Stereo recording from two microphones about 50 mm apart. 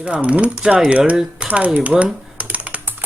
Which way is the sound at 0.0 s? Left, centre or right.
Right.